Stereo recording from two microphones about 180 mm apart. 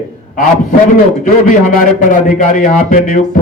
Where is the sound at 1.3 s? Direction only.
50° left (ahead or behind).